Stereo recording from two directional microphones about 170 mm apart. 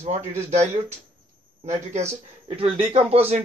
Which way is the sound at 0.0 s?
45° right (ahead or behind).